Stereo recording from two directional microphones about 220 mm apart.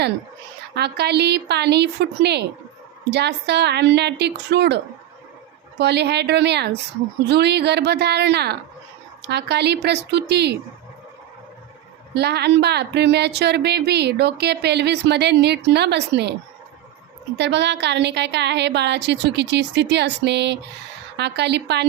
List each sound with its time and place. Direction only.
0.7 s a woman's voice: 50° right (ahead or behind)
5.8 s a woman's voice: 50° right (ahead or behind)
12.1 s a woman's voice: 50° right (ahead or behind)
17.3 s a woman's voice: 50° right (ahead or behind)